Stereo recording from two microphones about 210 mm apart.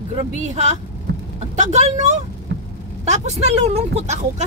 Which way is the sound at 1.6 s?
35° right (ahead or behind).